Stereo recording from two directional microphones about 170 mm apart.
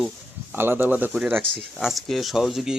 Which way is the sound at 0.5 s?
10° right (ahead or behind).